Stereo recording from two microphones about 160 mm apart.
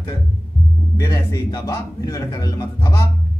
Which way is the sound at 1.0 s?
20° left (ahead or behind).